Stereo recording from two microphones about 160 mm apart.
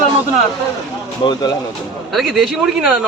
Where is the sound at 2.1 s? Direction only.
Centre (ahead or behind).